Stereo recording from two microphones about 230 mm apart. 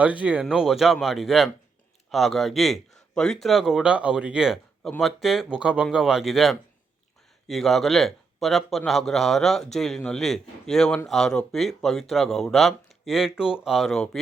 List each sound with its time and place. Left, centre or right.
0.0 s speech: centre